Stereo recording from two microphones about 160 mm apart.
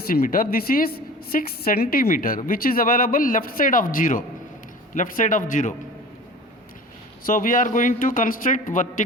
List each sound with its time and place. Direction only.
0.1 s a woman's voice: 65° left (ahead or behind)
7.3 s a woman's voice: 60° left (ahead or behind)